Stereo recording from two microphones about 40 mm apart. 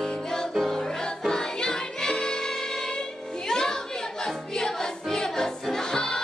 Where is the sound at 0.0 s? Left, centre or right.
Centre.